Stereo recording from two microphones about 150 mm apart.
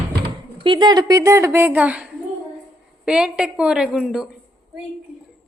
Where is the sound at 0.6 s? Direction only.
30° right (ahead or behind); by 2.0 s 10° right (ahead or behind).